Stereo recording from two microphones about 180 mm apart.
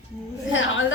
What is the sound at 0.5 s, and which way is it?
Speech, 90° left.